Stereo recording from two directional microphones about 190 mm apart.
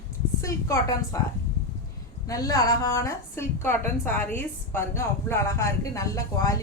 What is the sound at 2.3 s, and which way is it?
A woman's voice, 15° left (ahead or behind).